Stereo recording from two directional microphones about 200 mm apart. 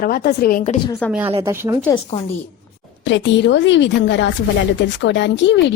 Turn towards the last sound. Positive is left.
turn(degrees=65)  # may be behind; listen again after turning